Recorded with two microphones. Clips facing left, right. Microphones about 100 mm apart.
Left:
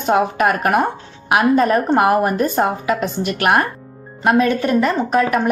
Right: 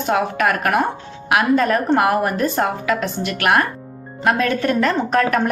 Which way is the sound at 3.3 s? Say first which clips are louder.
Left 1 dB; 25° left (ahead or behind).